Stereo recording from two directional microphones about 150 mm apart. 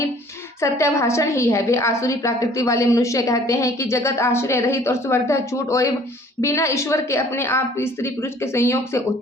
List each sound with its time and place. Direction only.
0.6 s a woman's voice: 20° left (ahead or behind)